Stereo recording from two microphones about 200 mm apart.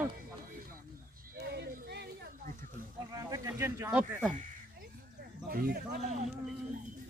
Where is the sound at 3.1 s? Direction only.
20° right (ahead or behind).